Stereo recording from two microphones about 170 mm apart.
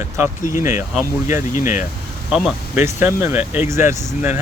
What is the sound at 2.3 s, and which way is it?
Speech, 5° right (ahead or behind).